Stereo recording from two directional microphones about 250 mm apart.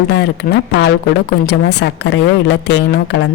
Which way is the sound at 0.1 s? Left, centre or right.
Left.